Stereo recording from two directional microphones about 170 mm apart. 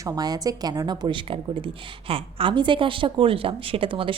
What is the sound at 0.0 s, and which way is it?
A woman's voice, 20° right (ahead or behind).